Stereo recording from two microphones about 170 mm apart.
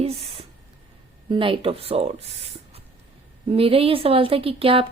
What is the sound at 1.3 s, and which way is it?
Speech, 30° right (ahead or behind).